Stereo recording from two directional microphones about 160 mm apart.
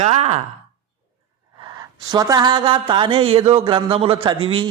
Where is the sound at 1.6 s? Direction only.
25° right (ahead or behind).